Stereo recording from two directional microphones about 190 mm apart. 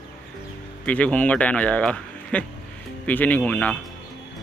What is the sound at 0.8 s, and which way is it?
Speech, 5° left (ahead or behind).